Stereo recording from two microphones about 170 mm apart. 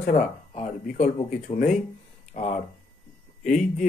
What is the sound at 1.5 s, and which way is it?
Speech, 40° left (ahead or behind).